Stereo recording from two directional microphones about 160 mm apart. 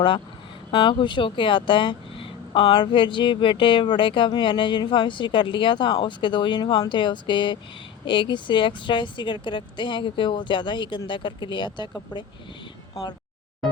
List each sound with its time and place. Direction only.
0.7 s speech: 30° left (ahead or behind)